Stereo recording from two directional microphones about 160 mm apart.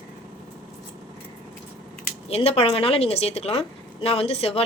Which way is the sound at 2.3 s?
40° left (ahead or behind).